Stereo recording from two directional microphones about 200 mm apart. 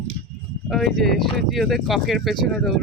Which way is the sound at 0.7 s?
Centre (ahead or behind).